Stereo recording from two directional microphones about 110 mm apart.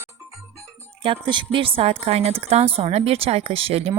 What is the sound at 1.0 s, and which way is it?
A woman's voice, 50° right (ahead or behind).